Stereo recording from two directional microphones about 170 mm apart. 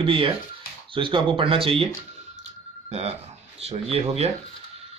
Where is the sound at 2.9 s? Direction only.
40° right (ahead or behind).